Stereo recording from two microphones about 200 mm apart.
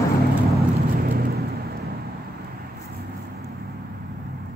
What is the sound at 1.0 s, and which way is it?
Vehicle, 50° right (ahead or behind).